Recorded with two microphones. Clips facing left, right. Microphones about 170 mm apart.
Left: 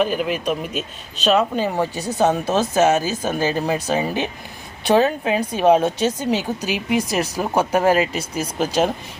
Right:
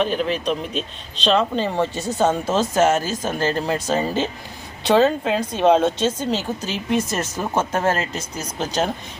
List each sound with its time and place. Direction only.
0.0 s speech: 10° left (ahead or behind)